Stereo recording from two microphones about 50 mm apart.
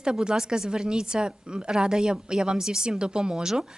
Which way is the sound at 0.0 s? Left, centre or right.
Centre.